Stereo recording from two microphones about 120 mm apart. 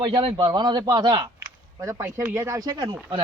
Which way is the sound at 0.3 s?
40° right (ahead or behind).